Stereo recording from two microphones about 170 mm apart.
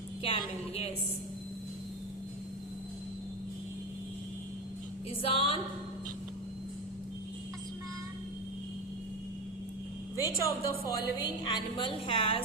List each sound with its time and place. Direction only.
0.2 s a woman's voice: 35° left (ahead or behind)
5.2 s a woman's voice: 30° left (ahead or behind)
10.2 s a woman's voice: 20° left (ahead or behind)